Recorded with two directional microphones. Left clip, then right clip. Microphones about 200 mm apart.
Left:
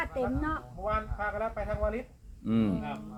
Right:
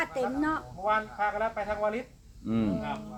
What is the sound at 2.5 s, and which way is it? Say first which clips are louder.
Speech: even; 55° left (ahead or behind).